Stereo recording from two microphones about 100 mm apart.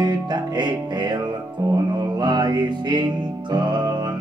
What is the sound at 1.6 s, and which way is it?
Music, 30° right (ahead or behind).